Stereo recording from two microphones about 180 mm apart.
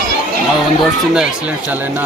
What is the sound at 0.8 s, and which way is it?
Speech, 5° right (ahead or behind).